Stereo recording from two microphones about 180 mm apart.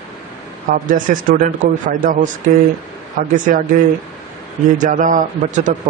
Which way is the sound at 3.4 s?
50° right (ahead or behind).